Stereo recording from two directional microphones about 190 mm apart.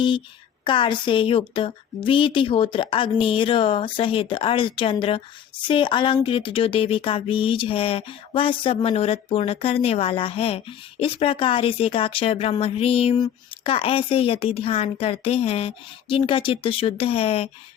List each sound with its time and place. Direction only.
0.6 s speech: 25° left (ahead or behind)